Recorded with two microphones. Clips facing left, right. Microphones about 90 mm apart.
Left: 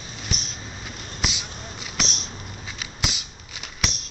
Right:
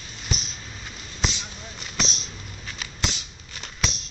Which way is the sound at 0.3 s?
Centre (ahead or behind).